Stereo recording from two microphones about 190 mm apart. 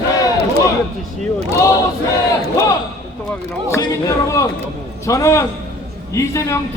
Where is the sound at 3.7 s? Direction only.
15° left (ahead or behind).